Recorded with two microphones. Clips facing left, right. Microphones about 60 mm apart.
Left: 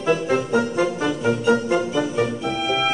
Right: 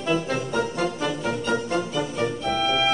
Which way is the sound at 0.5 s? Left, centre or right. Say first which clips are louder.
Left 5 dB; centre.